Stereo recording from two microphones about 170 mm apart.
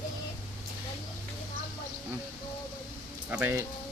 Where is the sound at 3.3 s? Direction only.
10° right (ahead or behind).